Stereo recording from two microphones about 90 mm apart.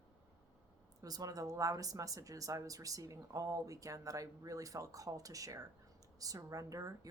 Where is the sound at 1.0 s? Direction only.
45° right (ahead or behind).